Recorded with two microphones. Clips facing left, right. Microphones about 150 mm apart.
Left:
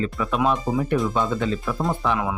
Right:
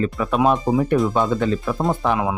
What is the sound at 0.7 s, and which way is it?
Speech, 20° right (ahead or behind).